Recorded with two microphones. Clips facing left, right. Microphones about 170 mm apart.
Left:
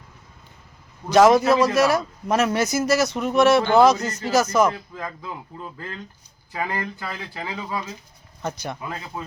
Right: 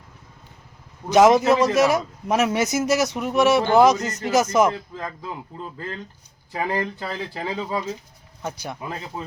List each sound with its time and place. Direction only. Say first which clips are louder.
1.1 s a man's voice: even; 20° right (ahead or behind)
6.5 s speech: right 3 dB; 25° right (ahead or behind)
8.4 s a man's voice: left 2 dB; 5° right (ahead or behind)